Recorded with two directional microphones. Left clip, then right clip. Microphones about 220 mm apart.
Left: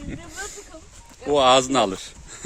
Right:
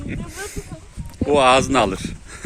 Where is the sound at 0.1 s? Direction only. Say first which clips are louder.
Right 3 dB; 15° left (ahead or behind).